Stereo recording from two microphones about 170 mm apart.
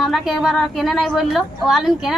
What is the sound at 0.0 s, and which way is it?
A woman's voice, centre (ahead or behind).